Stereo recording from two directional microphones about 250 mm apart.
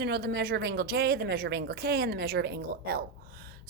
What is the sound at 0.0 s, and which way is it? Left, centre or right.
A woman's voice, right.